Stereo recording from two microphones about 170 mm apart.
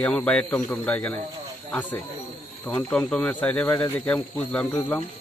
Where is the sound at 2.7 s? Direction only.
10° left (ahead or behind).